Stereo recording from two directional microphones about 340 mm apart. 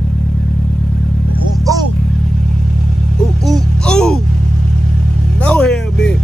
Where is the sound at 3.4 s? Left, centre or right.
Centre.